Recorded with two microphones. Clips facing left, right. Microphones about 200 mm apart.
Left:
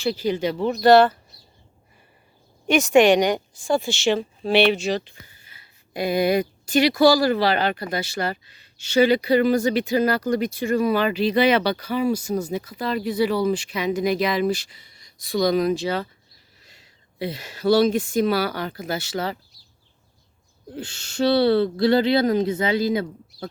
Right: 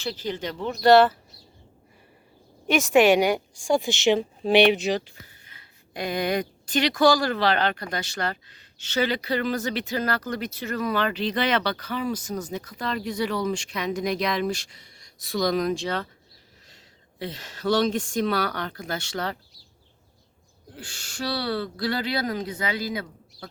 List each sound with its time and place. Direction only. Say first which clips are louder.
0.0 s speech: left 7 dB; 10° left (ahead or behind)
2.6 s a woman's voice: left 3 dB; centre (ahead or behind)
5.2 s speech: right 1 dB; 5° left (ahead or behind)
20.7 s speech: left 10 dB; 25° left (ahead or behind)